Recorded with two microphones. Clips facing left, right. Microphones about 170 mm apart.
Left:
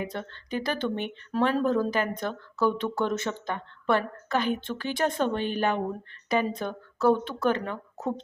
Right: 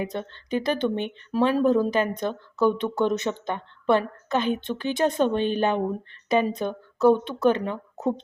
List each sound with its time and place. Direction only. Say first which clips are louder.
0.0 s speech: right 4 dB; 20° right (ahead or behind)